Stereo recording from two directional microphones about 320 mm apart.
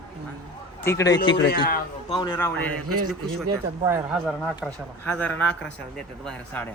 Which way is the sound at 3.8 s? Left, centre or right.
Centre.